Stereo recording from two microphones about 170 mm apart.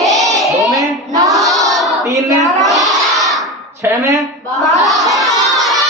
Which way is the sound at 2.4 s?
Centre (ahead or behind).